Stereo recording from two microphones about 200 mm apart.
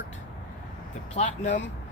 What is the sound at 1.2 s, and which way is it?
Speech, 35° left (ahead or behind).